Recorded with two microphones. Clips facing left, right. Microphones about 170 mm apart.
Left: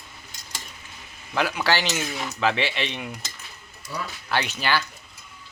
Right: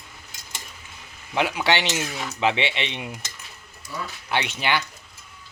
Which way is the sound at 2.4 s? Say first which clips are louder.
Right 1 dB; 20° right (ahead or behind).